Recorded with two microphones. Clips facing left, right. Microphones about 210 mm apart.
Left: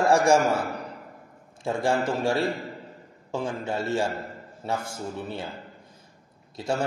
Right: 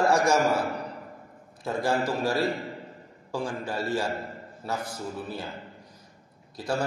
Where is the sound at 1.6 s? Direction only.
25° left (ahead or behind).